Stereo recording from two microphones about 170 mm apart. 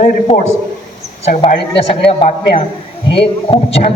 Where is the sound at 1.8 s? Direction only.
35° left (ahead or behind).